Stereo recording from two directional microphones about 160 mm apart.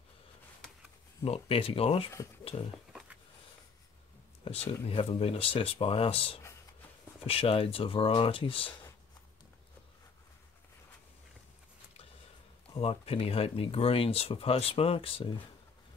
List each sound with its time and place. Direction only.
1.2 s speech: 35° left (ahead or behind)
4.4 s speech: 35° left (ahead or behind)
12.7 s speech: 40° left (ahead or behind)